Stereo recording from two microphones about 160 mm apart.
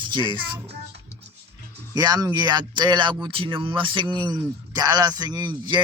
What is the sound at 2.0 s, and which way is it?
A man's voice, 25° right (ahead or behind).